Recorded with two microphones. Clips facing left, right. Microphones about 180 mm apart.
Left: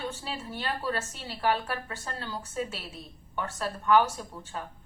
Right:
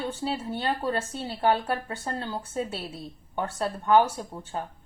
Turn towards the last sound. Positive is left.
turn(degrees=-30)  # may be behind; listen again after turning